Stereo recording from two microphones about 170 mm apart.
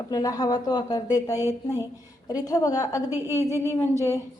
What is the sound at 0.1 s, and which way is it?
A woman's voice, 20° left (ahead or behind).